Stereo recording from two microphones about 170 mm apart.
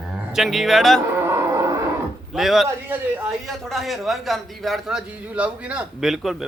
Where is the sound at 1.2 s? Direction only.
15° right (ahead or behind).